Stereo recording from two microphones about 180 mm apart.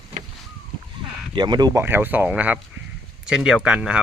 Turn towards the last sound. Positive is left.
turn(degrees=-5)  # may be behind; listen again after turning